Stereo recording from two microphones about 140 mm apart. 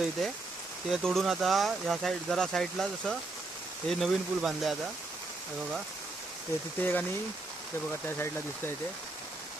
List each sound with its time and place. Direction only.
0.9 s speech: centre (ahead or behind)
6.7 s speech: 15° left (ahead or behind)
8.0 s speech: 15° left (ahead or behind)